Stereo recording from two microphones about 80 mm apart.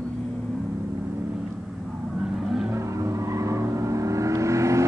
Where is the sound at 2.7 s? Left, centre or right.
Right.